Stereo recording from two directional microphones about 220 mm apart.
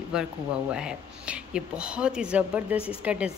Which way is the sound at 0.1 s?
5° right (ahead or behind).